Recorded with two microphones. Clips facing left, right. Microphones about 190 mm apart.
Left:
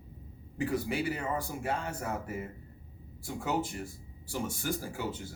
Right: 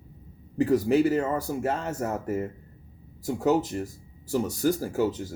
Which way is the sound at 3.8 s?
40° right (ahead or behind).